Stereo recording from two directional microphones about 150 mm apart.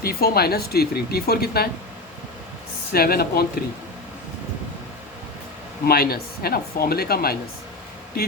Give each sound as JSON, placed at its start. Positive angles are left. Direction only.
{"t": 0.0, "sound": "speech", "side_deg": 85}
{"t": 2.9, "sound": "speech", "side_deg": 90}
{"t": 5.8, "sound": "speech", "side_deg": 85}